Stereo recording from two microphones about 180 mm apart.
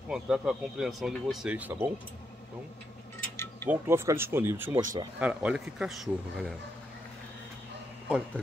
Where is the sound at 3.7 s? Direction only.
15° right (ahead or behind).